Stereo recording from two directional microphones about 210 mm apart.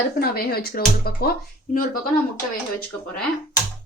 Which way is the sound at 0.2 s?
45° left (ahead or behind).